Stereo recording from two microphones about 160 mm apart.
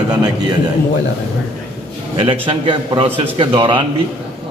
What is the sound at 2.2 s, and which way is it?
A man's voice, 35° right (ahead or behind).